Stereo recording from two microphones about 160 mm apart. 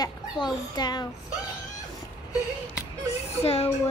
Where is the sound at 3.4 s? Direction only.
40° left (ahead or behind).